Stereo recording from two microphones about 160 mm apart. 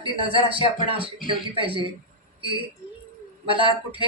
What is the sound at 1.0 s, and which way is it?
Speech, 35° right (ahead or behind).